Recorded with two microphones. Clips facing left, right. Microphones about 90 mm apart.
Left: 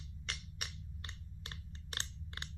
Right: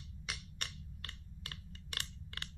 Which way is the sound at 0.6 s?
15° left (ahead or behind).